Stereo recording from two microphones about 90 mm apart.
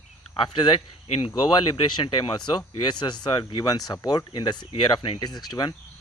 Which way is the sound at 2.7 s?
55° left (ahead or behind).